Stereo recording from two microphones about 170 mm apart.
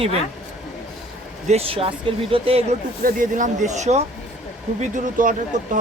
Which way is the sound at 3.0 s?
50° right (ahead or behind).